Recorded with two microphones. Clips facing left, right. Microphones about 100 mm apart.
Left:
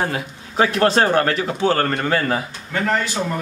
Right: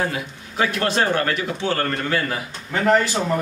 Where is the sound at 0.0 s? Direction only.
35° left (ahead or behind).